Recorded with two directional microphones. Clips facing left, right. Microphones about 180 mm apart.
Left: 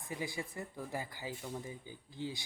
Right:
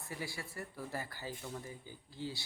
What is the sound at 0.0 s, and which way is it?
Speech, 20° left (ahead or behind).